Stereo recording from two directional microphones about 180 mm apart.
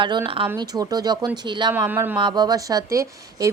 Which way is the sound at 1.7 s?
10° right (ahead or behind).